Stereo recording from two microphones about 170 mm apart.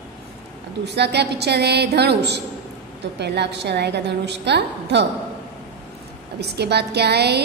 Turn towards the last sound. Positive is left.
turn(degrees=-75)  # may be behind; listen again after turning